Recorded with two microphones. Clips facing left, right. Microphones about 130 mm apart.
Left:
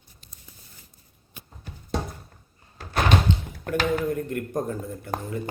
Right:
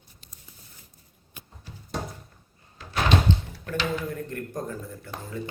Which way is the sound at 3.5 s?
50° left (ahead or behind).